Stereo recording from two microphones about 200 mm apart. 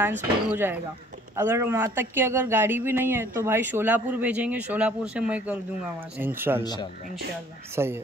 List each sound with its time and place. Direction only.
0.5 s speech: 10° right (ahead or behind)
6.6 s speech: 20° left (ahead or behind)
7.7 s speech: 10° right (ahead or behind)